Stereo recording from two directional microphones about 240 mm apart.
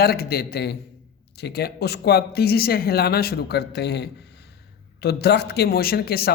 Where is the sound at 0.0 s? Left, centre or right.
Left.